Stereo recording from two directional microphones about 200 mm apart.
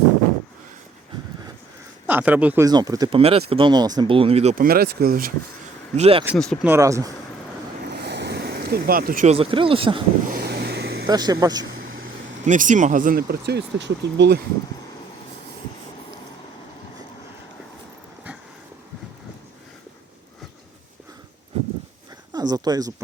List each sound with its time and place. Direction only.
2.0 s a man's voice: 10° right (ahead or behind)
2.6 s speech: 20° right (ahead or behind)
4.5 s speech: 45° right (ahead or behind)
6.0 s speech: 30° right (ahead or behind)
6.2 s speech: centre (ahead or behind)
6.7 s a man's voice: 15° right (ahead or behind)
7.9 s speech: 55° right (ahead or behind); by 10.0 s 25° right (ahead or behind)
10.2 s vehicle: 50° right (ahead or behind)
11.0 s speech: 20° right (ahead or behind)
12.5 s speech: 40° right (ahead or behind); by 14.4 s 60° right (ahead or behind)
22.3 s a sound: 20° right (ahead or behind)